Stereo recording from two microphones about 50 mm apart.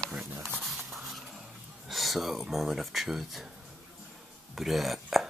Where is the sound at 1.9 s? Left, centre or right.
Centre.